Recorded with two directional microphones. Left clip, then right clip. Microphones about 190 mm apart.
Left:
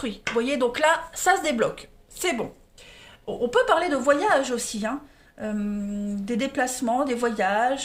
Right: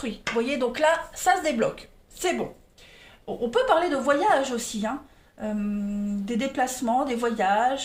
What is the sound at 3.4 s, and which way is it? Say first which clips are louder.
A woman's voice: left 1 dB; 35° left (ahead or behind).